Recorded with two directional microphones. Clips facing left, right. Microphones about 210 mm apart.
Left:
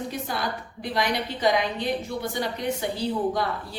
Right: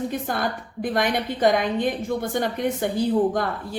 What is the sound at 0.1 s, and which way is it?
A woman's voice, 50° right (ahead or behind).